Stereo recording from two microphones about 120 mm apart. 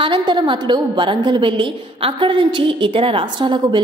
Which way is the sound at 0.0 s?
40° right (ahead or behind).